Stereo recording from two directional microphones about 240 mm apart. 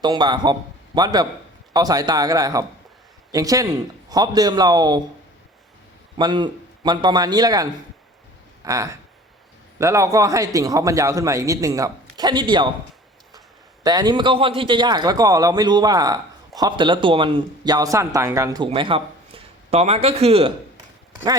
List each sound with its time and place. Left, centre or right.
0.0 s a man's voice: centre
6.1 s a man's voice: centre
13.8 s a man's voice: centre